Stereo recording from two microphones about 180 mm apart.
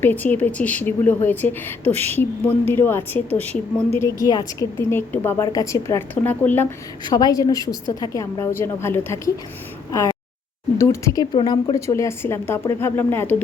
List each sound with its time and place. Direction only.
0.0 s a woman's voice: 10° left (ahead or behind)
7.0 s a woman's voice: 20° left (ahead or behind)